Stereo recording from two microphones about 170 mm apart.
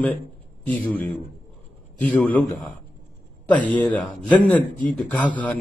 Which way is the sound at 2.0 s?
10° left (ahead or behind).